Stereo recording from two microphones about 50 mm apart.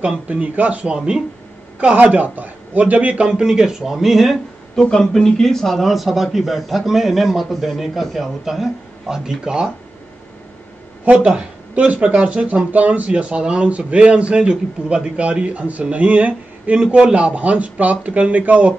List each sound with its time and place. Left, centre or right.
0.0 s speech: right
2.0 s a man's voice: right
3.3 s speech: centre
4.7 s speech: centre
11.2 s speech: right